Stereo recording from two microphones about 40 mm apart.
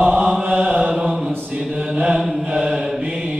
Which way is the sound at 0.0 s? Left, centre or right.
Centre.